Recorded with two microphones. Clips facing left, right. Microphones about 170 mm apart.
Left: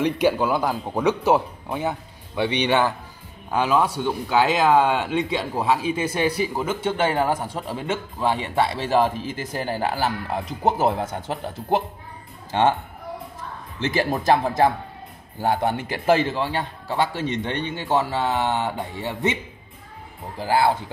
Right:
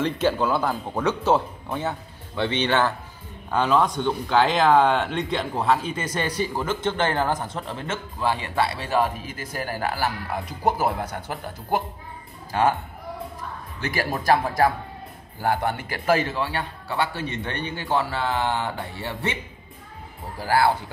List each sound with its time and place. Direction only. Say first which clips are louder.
0.0 s speech: left 2 dB; 10° left (ahead or behind)
13.7 s speech: left 4 dB; 25° left (ahead or behind)
20.3 s speech: left 1 dB; 20° left (ahead or behind)